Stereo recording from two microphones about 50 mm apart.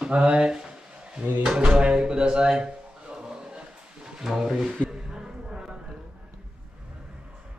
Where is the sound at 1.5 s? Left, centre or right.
Centre.